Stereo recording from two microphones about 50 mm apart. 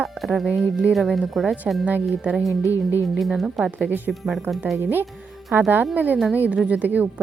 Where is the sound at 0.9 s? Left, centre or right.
Centre.